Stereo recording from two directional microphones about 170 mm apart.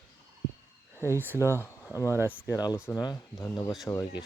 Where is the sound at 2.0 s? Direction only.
15° left (ahead or behind).